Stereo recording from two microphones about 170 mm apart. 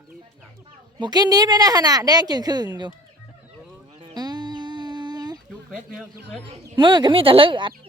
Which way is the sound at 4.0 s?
25° right (ahead or behind).